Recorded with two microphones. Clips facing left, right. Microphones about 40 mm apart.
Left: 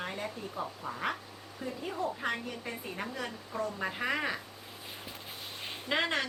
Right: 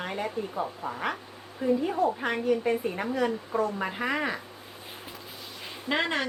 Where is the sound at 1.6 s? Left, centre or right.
Right.